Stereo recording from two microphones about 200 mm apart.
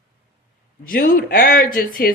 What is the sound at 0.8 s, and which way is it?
Speech, 45° left (ahead or behind).